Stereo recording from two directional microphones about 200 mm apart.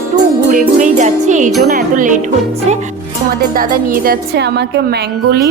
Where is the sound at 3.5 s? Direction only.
45° right (ahead or behind).